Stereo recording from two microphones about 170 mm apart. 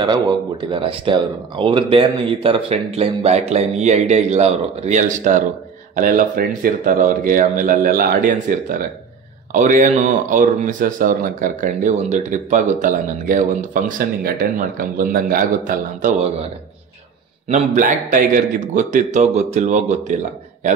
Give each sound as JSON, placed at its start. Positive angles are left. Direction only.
{"t": 0.0, "sound": "speech", "side_deg": -25}
{"t": 17.5, "sound": "speech", "side_deg": -50}